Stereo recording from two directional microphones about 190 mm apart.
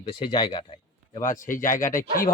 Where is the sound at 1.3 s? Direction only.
45° left (ahead or behind).